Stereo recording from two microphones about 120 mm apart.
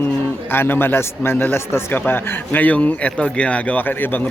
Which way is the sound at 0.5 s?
20° left (ahead or behind).